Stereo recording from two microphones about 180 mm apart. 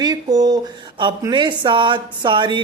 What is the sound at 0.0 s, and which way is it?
Speech, 20° right (ahead or behind).